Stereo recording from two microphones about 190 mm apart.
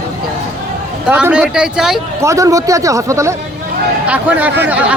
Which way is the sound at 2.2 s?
15° right (ahead or behind).